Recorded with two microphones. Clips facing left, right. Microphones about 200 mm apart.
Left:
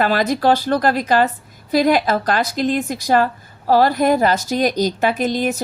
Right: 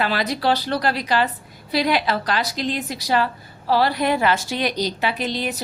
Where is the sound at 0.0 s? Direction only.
45° left (ahead or behind).